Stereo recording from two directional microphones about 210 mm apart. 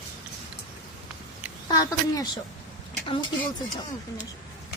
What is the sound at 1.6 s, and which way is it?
Speech, 20° left (ahead or behind).